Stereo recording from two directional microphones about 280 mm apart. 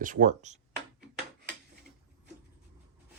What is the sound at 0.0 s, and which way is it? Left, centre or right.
Speech, right.